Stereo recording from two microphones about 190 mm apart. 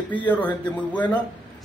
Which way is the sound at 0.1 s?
10° left (ahead or behind).